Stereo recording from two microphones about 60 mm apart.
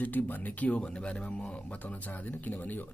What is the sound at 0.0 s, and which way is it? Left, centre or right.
Speech, left.